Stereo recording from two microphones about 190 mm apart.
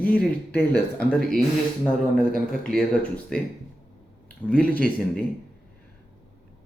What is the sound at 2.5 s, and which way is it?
Speech, 5° left (ahead or behind).